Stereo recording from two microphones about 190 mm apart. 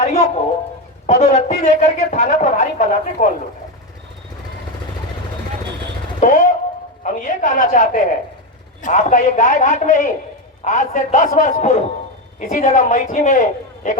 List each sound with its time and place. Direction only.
0.0 s a sound: 35° left (ahead or behind)
1.0 s speech: 35° left (ahead or behind)
6.1 s speech: 40° left (ahead or behind)